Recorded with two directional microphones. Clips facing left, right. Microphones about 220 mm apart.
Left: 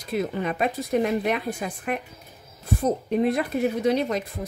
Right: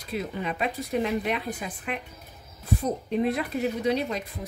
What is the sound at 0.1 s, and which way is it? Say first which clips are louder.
A woman's voice: left 5 dB; 45° left (ahead or behind).